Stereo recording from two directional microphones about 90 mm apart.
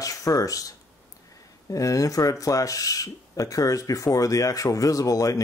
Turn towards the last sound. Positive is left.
turn(degrees=40)  # may be behind; listen again after turning